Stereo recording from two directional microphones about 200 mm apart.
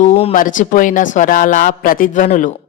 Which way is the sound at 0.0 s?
35° left (ahead or behind).